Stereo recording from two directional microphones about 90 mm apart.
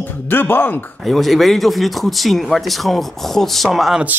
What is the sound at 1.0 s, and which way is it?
A man's voice, centre (ahead or behind).